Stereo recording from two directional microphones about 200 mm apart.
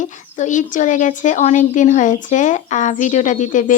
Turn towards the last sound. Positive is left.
turn(degrees=40)  # may be behind; listen again after turning